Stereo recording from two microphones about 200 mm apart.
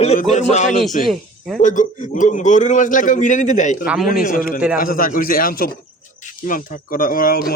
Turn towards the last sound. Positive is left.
turn(degrees=50)  # may be behind; listen again after turning